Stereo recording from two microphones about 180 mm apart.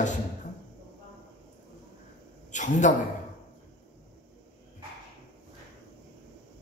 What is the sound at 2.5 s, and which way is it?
Speech, 45° left (ahead or behind).